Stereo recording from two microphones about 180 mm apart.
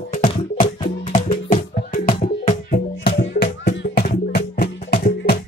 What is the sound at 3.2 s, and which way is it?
Music, 60° left (ahead or behind).